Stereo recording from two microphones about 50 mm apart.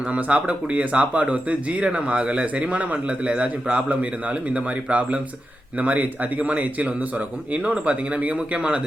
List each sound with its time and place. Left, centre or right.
0.1 s speech: right